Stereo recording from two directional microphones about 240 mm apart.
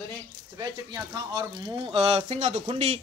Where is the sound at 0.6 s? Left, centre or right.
Centre.